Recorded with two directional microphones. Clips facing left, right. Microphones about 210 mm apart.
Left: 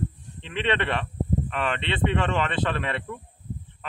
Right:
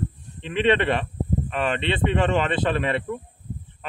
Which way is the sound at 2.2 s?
15° right (ahead or behind).